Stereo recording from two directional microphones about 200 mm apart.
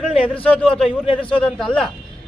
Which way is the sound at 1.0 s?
25° left (ahead or behind).